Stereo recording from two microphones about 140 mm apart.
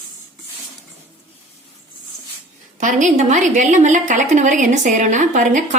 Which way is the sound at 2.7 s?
60° right (ahead or behind).